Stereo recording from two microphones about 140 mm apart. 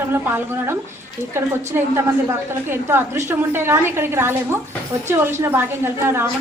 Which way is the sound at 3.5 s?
15° right (ahead or behind).